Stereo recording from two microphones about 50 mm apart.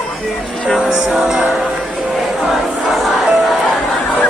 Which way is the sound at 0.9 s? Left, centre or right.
Centre.